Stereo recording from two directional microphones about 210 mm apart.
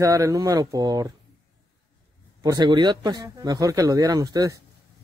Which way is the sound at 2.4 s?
20° right (ahead or behind).